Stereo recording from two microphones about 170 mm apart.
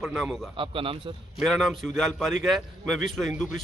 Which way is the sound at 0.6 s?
30° right (ahead or behind).